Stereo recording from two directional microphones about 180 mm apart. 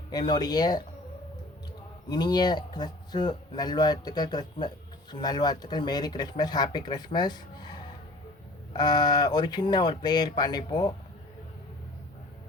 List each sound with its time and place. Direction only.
0.1 s speech: 20° left (ahead or behind)
2.0 s speech: 20° left (ahead or behind)